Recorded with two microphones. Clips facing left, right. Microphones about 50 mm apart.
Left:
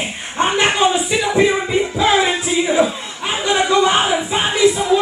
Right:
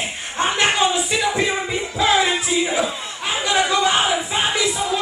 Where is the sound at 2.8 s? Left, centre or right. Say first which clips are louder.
Left 6 dB; centre.